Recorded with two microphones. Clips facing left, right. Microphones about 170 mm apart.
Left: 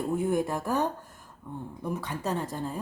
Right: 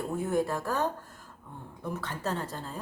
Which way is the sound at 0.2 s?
15° left (ahead or behind).